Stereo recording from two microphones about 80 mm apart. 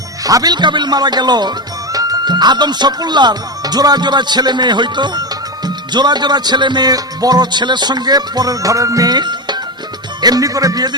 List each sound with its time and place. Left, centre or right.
0.3 s speech: right
10.2 s speech: right